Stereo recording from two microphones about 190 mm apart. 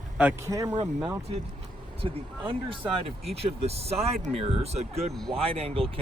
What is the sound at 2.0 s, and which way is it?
Speech, 30° right (ahead or behind).